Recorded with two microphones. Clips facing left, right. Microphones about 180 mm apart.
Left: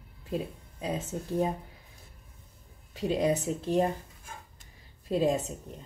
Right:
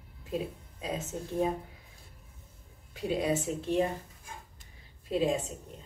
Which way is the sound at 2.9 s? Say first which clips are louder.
Left 3 dB; 40° left (ahead or behind).